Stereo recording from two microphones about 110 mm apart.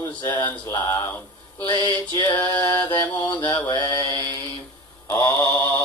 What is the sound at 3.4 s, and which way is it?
Mantra, 45° left (ahead or behind).